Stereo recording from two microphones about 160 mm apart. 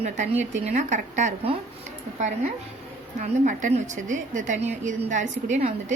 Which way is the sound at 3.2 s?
50° right (ahead or behind).